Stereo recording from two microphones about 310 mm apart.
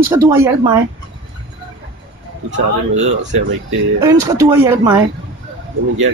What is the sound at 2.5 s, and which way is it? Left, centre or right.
Speech, right.